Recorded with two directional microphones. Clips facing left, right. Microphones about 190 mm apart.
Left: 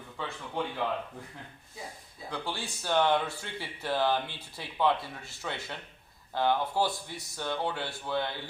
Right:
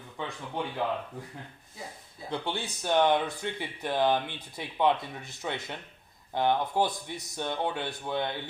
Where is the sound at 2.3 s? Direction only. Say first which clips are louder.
Right 3 dB; 25° right (ahead or behind).